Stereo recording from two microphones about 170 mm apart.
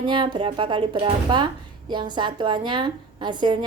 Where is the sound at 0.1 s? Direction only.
30° right (ahead or behind).